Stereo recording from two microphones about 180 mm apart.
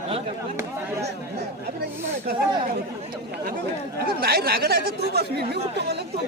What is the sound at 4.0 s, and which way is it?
Speech, 60° right (ahead or behind).